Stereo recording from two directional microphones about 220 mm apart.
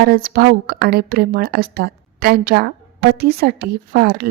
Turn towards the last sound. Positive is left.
turn(degrees=-45)  # may be behind; listen again after turning